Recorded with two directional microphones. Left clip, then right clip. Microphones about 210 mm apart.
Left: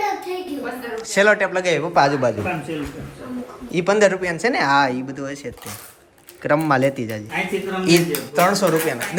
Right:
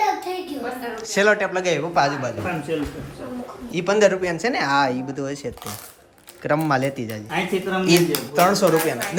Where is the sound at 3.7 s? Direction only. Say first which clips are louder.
Left 1 dB; 10° right (ahead or behind).